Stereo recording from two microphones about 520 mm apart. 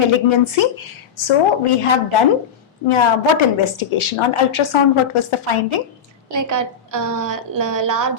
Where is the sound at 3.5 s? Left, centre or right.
Left.